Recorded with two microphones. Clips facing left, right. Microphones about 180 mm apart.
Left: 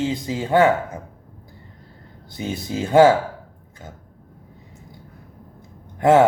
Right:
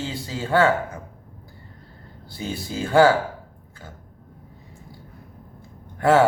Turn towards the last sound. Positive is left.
turn(degrees=20)  # may be behind; listen again after turning